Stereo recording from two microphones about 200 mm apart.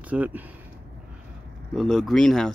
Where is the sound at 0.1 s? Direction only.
10° right (ahead or behind).